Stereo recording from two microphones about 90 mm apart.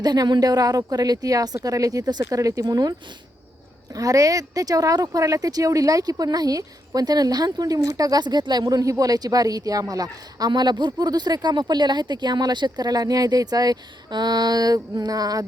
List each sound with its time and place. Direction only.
0.0 s speech: 50° right (ahead or behind)
3.9 s speech: 40° right (ahead or behind)